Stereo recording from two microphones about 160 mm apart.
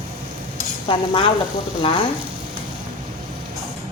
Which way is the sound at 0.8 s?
30° left (ahead or behind).